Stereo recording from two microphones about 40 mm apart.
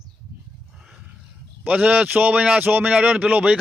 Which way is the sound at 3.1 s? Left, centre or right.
Right.